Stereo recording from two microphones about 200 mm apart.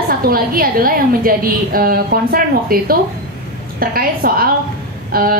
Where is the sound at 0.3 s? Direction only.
45° right (ahead or behind).